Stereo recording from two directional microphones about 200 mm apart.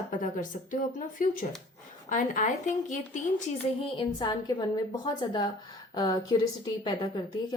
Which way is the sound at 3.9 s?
25° left (ahead or behind).